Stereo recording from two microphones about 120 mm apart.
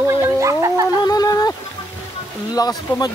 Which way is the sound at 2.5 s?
35° left (ahead or behind).